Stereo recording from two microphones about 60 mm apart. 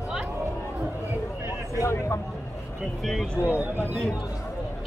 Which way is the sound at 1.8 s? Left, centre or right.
Left.